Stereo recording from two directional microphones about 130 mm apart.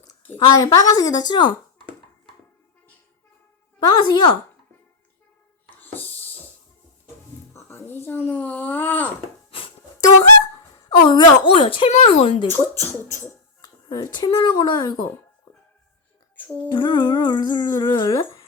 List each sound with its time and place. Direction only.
0.3 s speech: 30° left (ahead or behind)
3.8 s speech: 35° left (ahead or behind)
5.8 s a sound: 15° left (ahead or behind)
7.5 s a child's voice: 15° left (ahead or behind)
10.8 s speech: 35° left (ahead or behind)
11.9 s speech: 60° left (ahead or behind)
12.2 s speech: 40° left (ahead or behind)
12.5 s speech: 20° left (ahead or behind)
13.6 s a sound: 30° left (ahead or behind)
14.3 s speech: 35° left (ahead or behind)
16.6 s speech: 35° left (ahead or behind)